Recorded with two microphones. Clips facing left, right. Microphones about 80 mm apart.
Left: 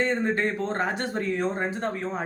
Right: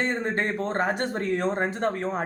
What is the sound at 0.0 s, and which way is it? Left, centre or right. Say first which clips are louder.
Speech: left 2 dB; right.